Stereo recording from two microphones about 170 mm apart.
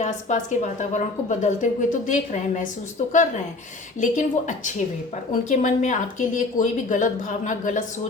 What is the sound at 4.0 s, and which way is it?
A woman's voice, 45° left (ahead or behind).